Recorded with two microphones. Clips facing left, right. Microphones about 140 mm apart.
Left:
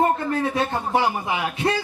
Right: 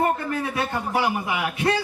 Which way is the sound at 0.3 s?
30° left (ahead or behind).